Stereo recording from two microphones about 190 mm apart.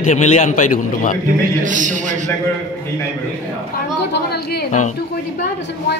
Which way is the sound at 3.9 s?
60° left (ahead or behind).